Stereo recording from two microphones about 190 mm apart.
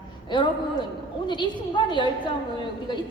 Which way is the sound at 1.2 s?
25° left (ahead or behind).